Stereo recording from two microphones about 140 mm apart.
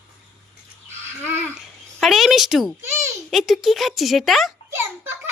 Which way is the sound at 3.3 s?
Centre (ahead or behind).